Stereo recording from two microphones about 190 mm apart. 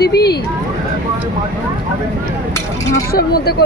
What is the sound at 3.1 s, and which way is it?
Speech, 55° left (ahead or behind).